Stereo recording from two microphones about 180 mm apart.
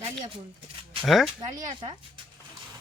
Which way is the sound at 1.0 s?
Centre (ahead or behind).